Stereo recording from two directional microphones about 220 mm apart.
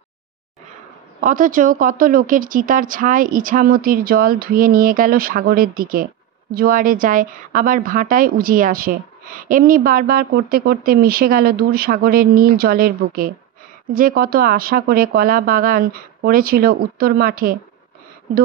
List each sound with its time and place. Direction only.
1.2 s a woman's voice: 35° right (ahead or behind)